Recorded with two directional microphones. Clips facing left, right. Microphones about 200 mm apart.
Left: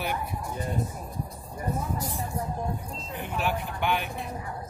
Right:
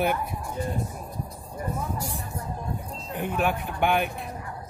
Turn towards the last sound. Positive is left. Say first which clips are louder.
# right 4 dB
turn(degrees=-50)  # may be behind; listen again after turning